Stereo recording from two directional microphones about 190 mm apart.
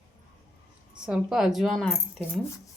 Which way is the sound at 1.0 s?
5° right (ahead or behind).